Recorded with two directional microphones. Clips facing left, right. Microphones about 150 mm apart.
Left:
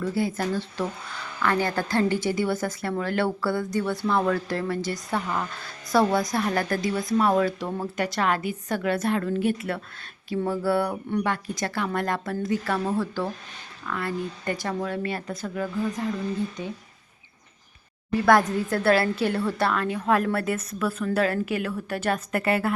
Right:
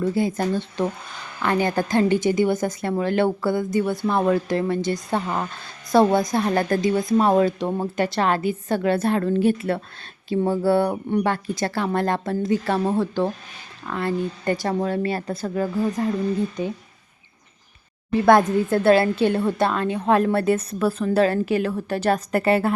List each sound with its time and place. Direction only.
0.0 s a woman's voice: 20° right (ahead or behind)
18.1 s speech: 25° right (ahead or behind)